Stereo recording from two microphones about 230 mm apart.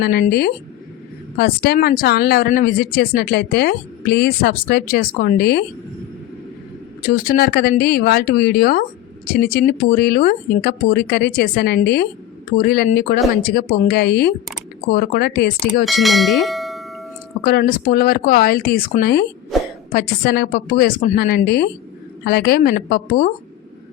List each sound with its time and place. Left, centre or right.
0.0 s speech: left
7.1 s speech: left
15.8 s speech: centre
17.4 s speech: left
19.5 s a sound: centre
19.9 s speech: left